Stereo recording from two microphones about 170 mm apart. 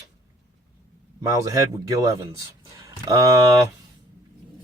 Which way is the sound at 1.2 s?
20° right (ahead or behind).